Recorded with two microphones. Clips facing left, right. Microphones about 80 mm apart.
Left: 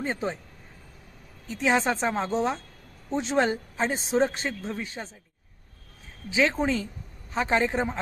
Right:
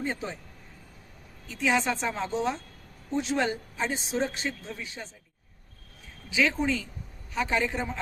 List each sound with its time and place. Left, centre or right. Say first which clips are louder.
0.0 s speech: left 3 dB; left
1.5 s speech: left 2 dB; left
6.3 s a man's voice: left 2 dB; left